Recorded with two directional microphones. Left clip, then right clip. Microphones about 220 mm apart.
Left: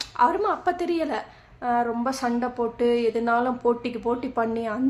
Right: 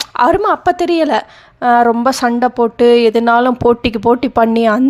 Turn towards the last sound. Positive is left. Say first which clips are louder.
# right 15 dB
turn(degrees=-40)  # may be behind; listen again after turning